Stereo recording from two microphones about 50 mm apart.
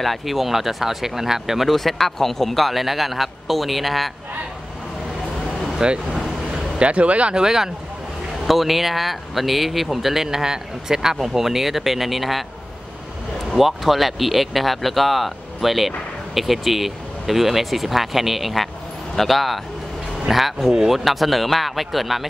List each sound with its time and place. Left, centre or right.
0.0 s speech: centre
1.7 s speech: centre
5.8 s vehicle: centre
6.9 s speech: right; by 12.4 s centre
13.5 s speech: centre